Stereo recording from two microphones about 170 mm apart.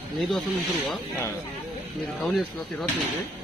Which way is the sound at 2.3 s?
Centre (ahead or behind).